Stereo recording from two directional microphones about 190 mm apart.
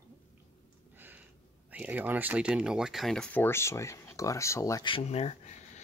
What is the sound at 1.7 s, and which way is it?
Speech, 5° right (ahead or behind).